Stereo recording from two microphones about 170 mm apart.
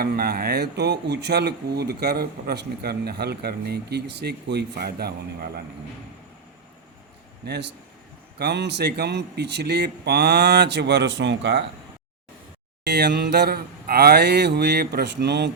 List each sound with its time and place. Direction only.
0.0 s speech: 65° right (ahead or behind)
7.4 s speech: 75° right (ahead or behind)
12.9 s speech: 80° right